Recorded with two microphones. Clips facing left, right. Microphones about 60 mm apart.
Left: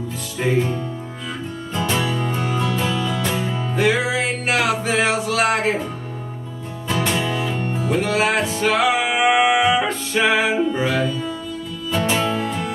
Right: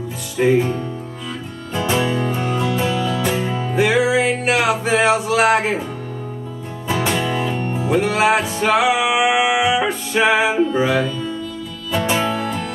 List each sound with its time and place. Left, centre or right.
0.4 s music: centre
2.0 s music: centre
2.5 s music: centre
6.9 s music: centre
7.6 s music: centre
7.9 s music: centre
10.8 s speech: centre
11.9 s music: centre